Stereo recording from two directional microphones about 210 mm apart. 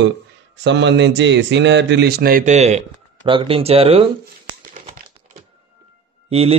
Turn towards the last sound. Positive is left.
turn(degrees=-30)  # may be behind; listen again after turning